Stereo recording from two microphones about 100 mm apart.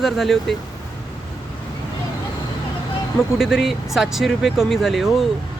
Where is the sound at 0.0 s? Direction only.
Centre (ahead or behind).